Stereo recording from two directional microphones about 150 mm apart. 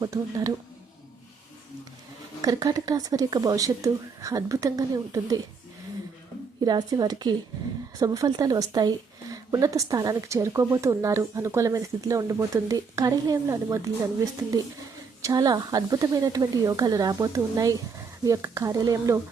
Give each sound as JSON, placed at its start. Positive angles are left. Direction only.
{"t": 0.0, "sound": "a woman's voice", "side_deg": -25}
{"t": 2.4, "sound": "a woman's voice", "side_deg": -25}
{"t": 6.7, "sound": "a woman's voice", "side_deg": -25}
{"t": 15.2, "sound": "a woman's voice", "side_deg": -25}